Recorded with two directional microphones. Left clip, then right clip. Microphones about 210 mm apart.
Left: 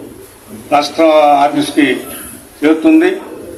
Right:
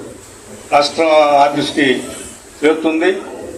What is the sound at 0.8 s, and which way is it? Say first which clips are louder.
A man's voice: left 2 dB; 50° left (ahead or behind).